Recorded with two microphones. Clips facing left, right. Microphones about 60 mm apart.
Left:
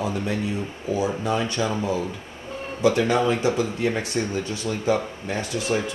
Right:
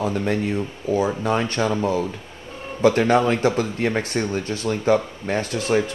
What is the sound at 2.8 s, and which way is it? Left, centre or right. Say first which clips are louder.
Speech: right 3 dB; right.